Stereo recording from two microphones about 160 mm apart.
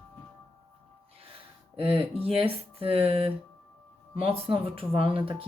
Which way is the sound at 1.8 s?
40° right (ahead or behind).